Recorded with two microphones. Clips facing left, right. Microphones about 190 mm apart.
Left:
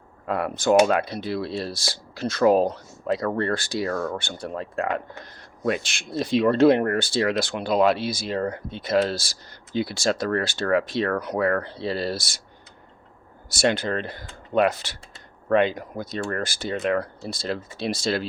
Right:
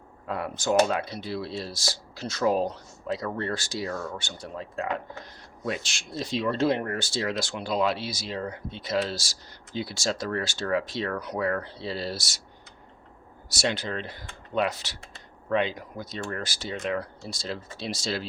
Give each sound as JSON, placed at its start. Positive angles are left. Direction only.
{"t": 0.3, "sound": "speech", "side_deg": 65}
{"t": 13.5, "sound": "speech", "side_deg": 55}